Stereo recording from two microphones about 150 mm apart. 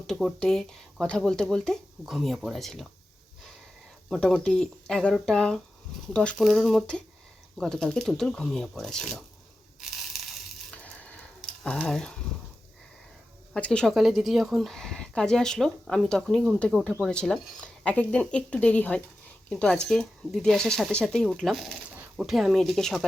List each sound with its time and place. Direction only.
0.1 s speech: centre (ahead or behind)
4.1 s speech: centre (ahead or behind)
9.8 s crushing: centre (ahead or behind)
11.0 s a sound: 10° left (ahead or behind)
13.5 s speech: 5° left (ahead or behind)